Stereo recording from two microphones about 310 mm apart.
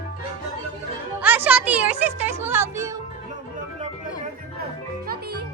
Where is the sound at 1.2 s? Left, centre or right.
Centre.